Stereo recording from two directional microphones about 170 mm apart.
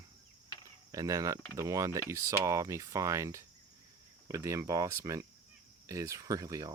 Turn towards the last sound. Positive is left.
turn(degrees=-20)  # may be behind; listen again after turning